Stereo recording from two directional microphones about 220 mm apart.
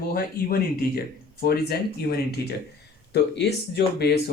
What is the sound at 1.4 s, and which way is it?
Speech, 45° left (ahead or behind).